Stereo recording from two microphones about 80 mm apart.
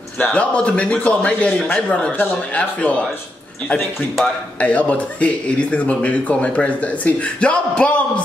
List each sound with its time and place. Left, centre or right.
0.2 s speech: centre
4.6 s speech: centre